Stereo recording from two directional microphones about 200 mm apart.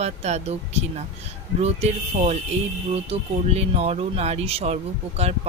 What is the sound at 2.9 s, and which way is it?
Speech, 30° right (ahead or behind).